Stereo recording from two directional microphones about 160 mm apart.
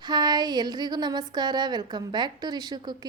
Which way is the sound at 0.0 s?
25° right (ahead or behind).